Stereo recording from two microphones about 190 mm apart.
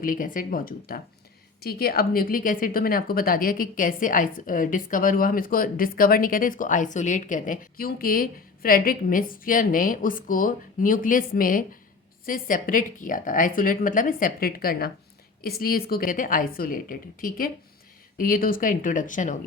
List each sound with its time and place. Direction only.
0.0 s a woman's voice: 45° left (ahead or behind)